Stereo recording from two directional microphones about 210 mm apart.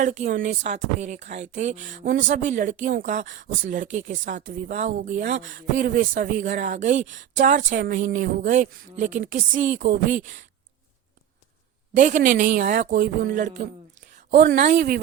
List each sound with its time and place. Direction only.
0.0 s speech: 35° right (ahead or behind)
11.9 s speech: 40° right (ahead or behind)